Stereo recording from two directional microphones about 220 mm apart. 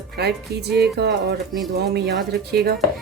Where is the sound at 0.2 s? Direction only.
50° right (ahead or behind).